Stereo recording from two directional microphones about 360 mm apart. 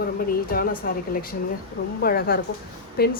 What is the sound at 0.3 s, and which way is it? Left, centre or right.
A woman's voice, left.